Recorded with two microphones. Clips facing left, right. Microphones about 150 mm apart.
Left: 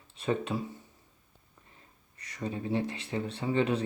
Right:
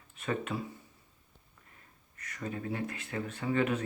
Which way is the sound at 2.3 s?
25° left (ahead or behind).